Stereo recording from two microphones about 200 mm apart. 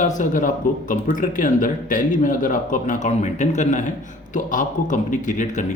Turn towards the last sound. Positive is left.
turn(degrees=40)  # may be behind; listen again after turning